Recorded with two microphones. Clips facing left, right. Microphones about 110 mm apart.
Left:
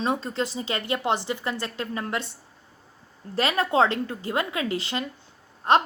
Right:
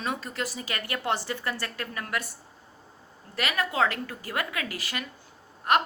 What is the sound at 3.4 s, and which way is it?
Speech, 30° left (ahead or behind).